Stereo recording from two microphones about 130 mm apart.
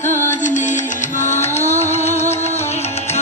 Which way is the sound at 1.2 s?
60° left (ahead or behind).